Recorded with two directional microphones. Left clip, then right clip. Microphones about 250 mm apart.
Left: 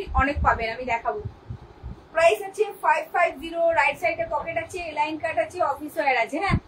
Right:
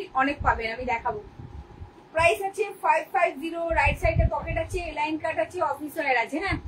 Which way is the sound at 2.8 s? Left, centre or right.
Centre.